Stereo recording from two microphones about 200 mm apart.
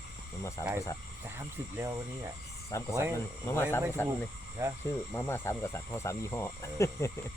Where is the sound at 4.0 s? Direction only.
10° left (ahead or behind).